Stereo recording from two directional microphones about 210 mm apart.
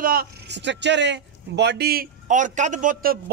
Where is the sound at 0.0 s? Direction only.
45° right (ahead or behind).